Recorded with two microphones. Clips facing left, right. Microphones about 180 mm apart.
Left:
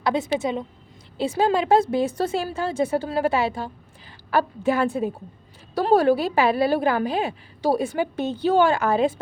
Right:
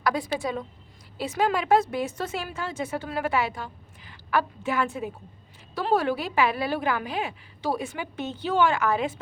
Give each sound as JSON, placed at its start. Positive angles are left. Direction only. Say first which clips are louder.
{"t": 0.0, "sound": "a woman's voice", "louder": "left 4 dB", "side_deg": 25}